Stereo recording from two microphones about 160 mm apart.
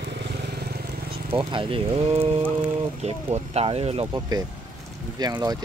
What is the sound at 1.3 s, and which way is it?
Speech, 35° right (ahead or behind).